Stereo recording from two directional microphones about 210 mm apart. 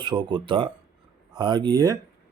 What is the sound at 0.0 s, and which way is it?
Speech, 20° right (ahead or behind).